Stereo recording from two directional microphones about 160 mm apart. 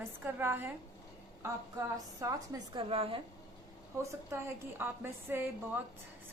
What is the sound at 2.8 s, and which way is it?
Speech, 35° right (ahead or behind).